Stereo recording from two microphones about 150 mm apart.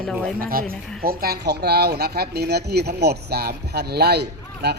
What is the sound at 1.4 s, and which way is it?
Speech, 90° right.